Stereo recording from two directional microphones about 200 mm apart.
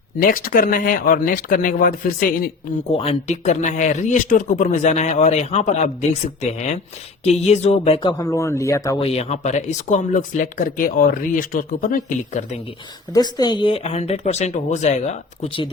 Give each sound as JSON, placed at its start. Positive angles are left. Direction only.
{"t": 0.2, "sound": "speech", "side_deg": 45}
{"t": 2.9, "sound": "speech", "side_deg": 30}
{"t": 8.2, "sound": "speech", "side_deg": 15}
{"t": 9.0, "sound": "speech", "side_deg": 30}
{"t": 13.1, "sound": "speech", "side_deg": 20}